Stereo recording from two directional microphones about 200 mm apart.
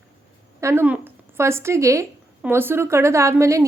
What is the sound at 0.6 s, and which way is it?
Speech, 10° right (ahead or behind).